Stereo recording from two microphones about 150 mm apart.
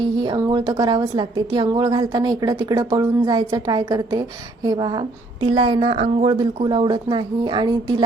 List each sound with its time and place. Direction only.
0.0 s a woman's voice: 30° right (ahead or behind)
6.3 s a woman's voice: 30° right (ahead or behind)